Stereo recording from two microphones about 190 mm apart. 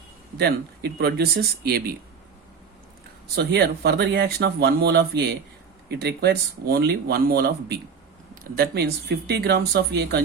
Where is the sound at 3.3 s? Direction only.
60° right (ahead or behind).